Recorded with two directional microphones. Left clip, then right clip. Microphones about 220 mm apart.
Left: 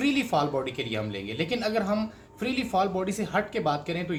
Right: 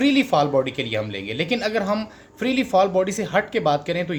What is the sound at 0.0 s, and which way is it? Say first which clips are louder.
Speech: right 7 dB; 50° right (ahead or behind).